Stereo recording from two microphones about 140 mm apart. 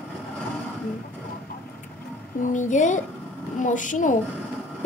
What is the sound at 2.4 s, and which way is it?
A woman's voice, 65° left (ahead or behind).